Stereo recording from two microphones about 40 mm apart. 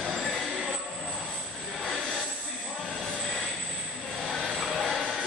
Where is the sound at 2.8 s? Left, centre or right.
Centre.